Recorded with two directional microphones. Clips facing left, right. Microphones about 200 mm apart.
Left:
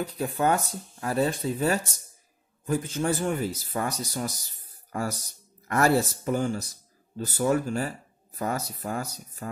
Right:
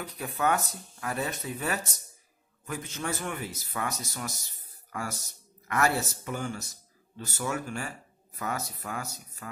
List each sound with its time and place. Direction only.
0.0 s speech: 30° left (ahead or behind)